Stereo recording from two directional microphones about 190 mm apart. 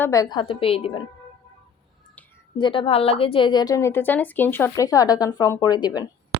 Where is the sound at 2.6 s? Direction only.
25° left (ahead or behind).